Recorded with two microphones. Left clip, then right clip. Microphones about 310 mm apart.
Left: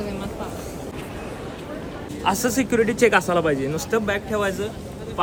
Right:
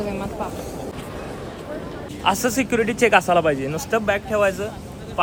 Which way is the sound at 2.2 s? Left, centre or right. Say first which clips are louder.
Right 2 dB; centre.